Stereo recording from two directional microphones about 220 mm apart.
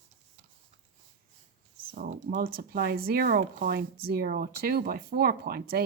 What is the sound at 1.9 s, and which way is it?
Speech, 40° right (ahead or behind).